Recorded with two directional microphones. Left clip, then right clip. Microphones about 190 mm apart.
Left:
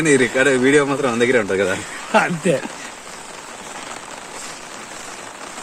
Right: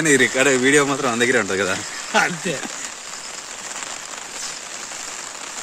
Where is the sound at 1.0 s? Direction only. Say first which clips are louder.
Left 2 dB; 35° right (ahead or behind).